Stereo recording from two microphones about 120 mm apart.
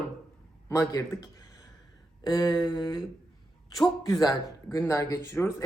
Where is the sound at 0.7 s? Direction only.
25° left (ahead or behind).